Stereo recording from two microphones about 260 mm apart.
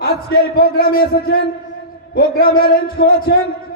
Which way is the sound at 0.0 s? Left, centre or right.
Left.